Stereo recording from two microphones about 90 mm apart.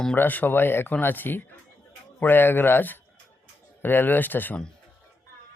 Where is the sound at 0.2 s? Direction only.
20° left (ahead or behind).